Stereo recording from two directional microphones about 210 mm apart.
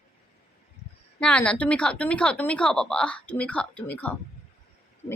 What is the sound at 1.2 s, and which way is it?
A woman's voice, 5° left (ahead or behind).